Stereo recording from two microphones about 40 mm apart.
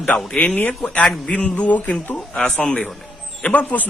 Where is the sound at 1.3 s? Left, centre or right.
Left.